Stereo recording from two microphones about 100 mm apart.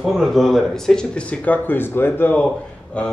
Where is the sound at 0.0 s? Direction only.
Centre (ahead or behind).